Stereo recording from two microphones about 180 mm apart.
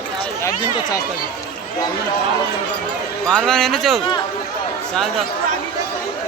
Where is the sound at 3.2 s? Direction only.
5° left (ahead or behind).